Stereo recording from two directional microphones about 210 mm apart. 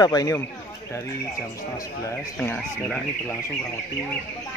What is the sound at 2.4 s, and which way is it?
Speech, 5° left (ahead or behind).